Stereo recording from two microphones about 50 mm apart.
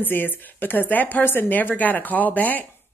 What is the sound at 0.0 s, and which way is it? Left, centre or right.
A woman's voice, left.